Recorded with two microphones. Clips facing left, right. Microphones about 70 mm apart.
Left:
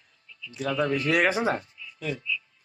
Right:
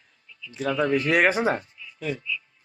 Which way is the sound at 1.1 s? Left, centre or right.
Centre.